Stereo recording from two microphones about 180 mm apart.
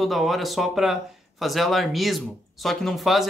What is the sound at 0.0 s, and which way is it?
Speech, centre (ahead or behind).